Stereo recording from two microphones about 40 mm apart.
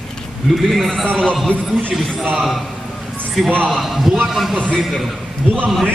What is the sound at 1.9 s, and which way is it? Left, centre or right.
Speech, centre.